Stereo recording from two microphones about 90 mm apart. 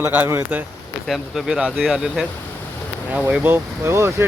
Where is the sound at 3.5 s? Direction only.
30° right (ahead or behind).